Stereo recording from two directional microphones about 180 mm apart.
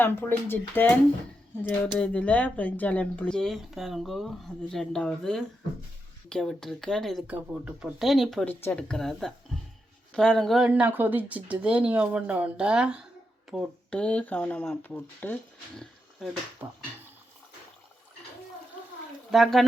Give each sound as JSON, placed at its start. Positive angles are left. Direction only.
{"t": 0.0, "sound": "speech", "side_deg": 10}
{"t": 16.6, "sound": "speech", "side_deg": -10}
{"t": 19.3, "sound": "speech", "side_deg": 0}